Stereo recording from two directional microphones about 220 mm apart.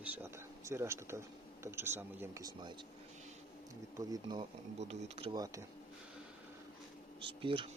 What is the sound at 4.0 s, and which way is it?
Speech, 20° right (ahead or behind).